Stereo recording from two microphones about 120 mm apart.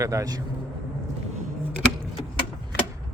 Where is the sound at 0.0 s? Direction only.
25° right (ahead or behind).